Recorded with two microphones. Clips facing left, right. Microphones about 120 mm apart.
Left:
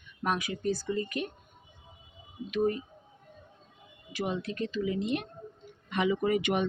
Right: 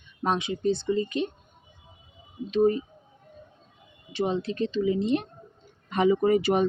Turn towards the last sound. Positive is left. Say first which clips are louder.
# right 6 dB
turn(degrees=-35)  # may be behind; listen again after turning